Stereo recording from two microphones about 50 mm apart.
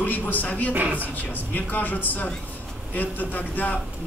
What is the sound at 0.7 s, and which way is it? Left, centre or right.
Speech, right.